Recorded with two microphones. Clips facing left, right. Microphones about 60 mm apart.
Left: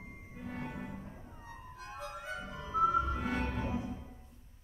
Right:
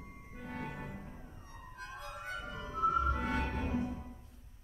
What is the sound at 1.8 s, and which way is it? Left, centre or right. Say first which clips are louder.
Music: left 3 dB; left.